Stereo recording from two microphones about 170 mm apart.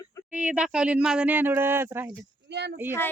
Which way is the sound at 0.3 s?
5° right (ahead or behind).